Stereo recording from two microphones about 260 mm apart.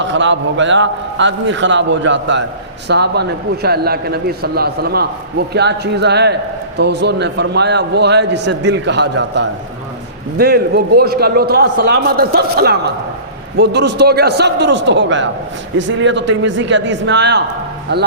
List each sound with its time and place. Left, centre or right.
0.0 s a man's voice: right